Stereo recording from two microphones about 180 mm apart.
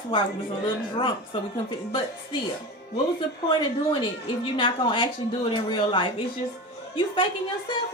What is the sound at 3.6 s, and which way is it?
A woman's voice, 25° left (ahead or behind).